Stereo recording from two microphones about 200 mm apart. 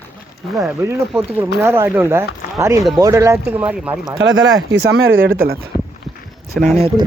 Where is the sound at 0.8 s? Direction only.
10° right (ahead or behind).